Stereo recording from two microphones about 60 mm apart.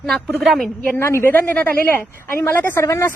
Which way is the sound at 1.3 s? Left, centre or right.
Left.